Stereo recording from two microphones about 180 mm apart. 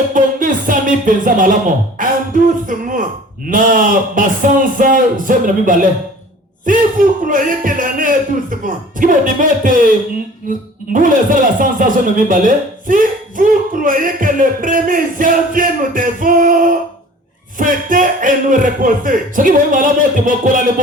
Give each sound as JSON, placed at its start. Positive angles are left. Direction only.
{"t": 0.1, "sound": "speech", "side_deg": -50}
{"t": 10.9, "sound": "speech", "side_deg": -50}